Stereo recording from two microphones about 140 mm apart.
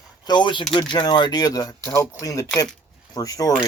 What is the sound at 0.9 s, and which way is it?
Speech, 30° left (ahead or behind).